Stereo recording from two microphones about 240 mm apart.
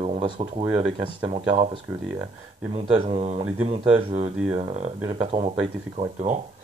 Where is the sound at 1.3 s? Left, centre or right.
Right.